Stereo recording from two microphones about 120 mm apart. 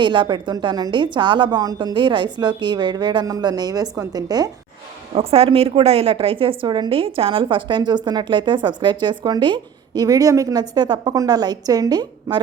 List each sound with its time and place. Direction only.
0.0 s a woman's voice: 40° right (ahead or behind)
5.1 s a woman's voice: 55° right (ahead or behind); by 12.4 s 35° right (ahead or behind)